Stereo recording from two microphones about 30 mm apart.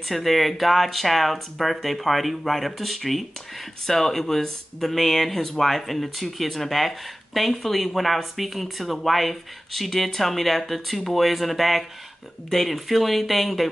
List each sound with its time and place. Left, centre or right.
0.1 s speech: centre
3.8 s speech: centre